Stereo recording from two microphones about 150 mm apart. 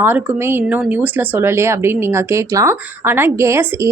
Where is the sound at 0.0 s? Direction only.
15° right (ahead or behind).